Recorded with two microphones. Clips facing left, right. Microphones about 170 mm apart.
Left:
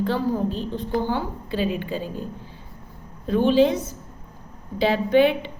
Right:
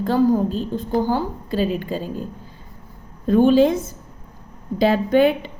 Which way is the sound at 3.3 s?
45° right (ahead or behind).